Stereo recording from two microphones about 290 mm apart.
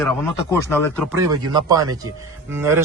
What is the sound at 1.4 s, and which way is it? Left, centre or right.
Speech, centre.